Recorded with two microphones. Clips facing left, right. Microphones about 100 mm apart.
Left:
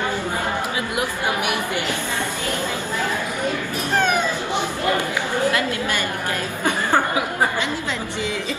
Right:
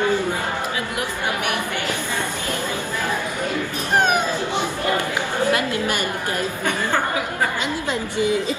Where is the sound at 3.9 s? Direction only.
15° right (ahead or behind).